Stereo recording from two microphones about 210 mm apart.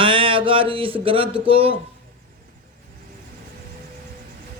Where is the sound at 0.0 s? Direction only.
25° right (ahead or behind).